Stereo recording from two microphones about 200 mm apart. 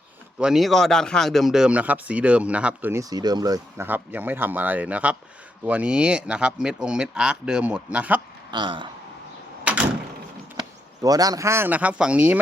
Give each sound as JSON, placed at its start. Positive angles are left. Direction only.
{"t": 0.3, "sound": "speech", "side_deg": -5}
{"t": 8.4, "sound": "speech", "side_deg": -20}
{"t": 9.7, "sound": "door", "side_deg": -5}
{"t": 10.6, "sound": "speech", "side_deg": -20}